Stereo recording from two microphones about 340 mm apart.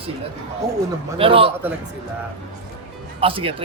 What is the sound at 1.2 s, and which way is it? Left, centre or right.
Speech, centre.